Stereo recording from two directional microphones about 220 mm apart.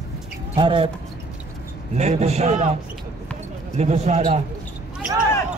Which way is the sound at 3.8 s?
30° right (ahead or behind).